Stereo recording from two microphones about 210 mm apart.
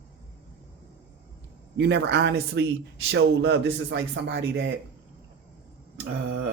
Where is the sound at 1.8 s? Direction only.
50° right (ahead or behind).